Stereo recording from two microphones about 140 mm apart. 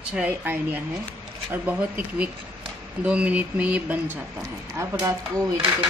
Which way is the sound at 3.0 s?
10° right (ahead or behind).